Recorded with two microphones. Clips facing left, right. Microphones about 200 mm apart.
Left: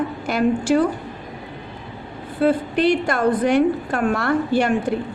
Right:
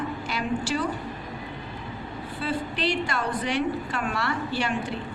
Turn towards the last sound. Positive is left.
turn(degrees=50)  # may be behind; listen again after turning